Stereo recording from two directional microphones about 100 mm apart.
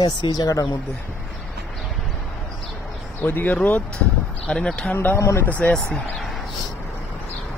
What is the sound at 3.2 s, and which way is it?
Speech, 15° left (ahead or behind).